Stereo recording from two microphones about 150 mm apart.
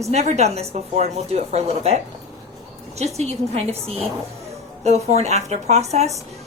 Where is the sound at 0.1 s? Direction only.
45° right (ahead or behind).